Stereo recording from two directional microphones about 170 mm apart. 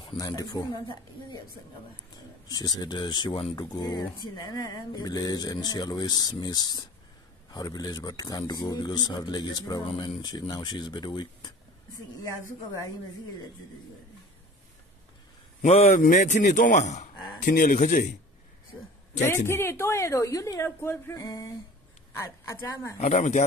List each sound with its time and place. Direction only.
0.2 s a man's voice: 20° left (ahead or behind)
15.6 s a man's voice: 40° left (ahead or behind)
19.2 s a woman's voice: 15° left (ahead or behind)
22.9 s a man's voice: 45° left (ahead or behind)